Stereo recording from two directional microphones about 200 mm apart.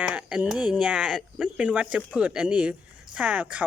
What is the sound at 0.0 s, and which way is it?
Speech, 5° right (ahead or behind).